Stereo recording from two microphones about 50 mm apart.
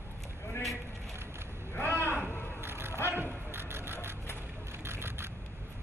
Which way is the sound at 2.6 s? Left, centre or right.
Right.